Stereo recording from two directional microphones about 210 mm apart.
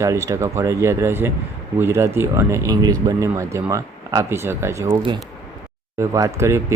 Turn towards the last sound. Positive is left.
turn(degrees=-15)  # may be behind; listen again after turning